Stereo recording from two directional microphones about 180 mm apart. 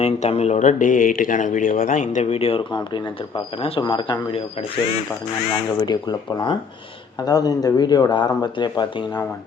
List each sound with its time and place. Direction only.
0.0 s speech: 35° left (ahead or behind)
5.8 s speech: 25° left (ahead or behind)